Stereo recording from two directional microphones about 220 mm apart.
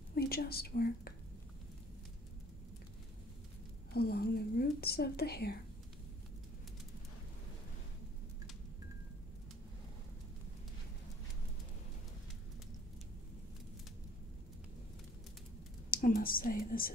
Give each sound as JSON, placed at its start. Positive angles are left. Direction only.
{"t": 0.1, "sound": "speech", "side_deg": 45}
{"t": 3.9, "sound": "speech", "side_deg": 45}
{"t": 15.9, "sound": "speech", "side_deg": 40}